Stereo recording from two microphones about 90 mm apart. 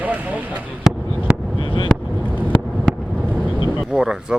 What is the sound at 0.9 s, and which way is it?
Fireworks, 5° right (ahead or behind).